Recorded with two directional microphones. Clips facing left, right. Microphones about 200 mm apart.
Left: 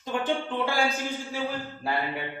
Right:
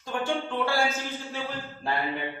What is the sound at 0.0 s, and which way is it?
A man's voice, 20° left (ahead or behind).